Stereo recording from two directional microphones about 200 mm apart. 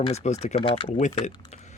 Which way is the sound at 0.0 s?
35° left (ahead or behind).